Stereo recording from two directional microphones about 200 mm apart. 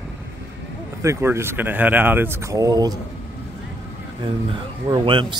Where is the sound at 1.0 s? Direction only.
15° right (ahead or behind).